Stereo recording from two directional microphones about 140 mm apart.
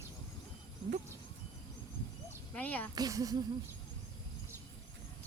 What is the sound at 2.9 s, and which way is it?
Speech, 25° right (ahead or behind).